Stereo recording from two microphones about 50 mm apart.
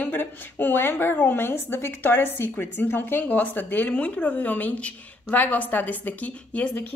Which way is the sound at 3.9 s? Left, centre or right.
Left.